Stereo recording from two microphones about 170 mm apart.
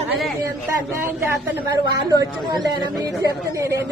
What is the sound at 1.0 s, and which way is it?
Speech, 15° right (ahead or behind).